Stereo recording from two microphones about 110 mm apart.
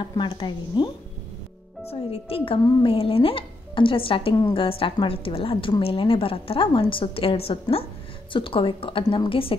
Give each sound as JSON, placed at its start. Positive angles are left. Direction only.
{"t": 0.3, "sound": "a woman's voice", "side_deg": 50}
{"t": 1.9, "sound": "a woman's voice", "side_deg": 65}